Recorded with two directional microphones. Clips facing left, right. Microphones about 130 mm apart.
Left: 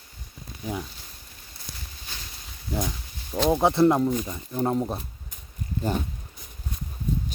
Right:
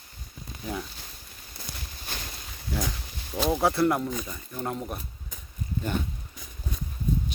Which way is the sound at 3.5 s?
20° left (ahead or behind).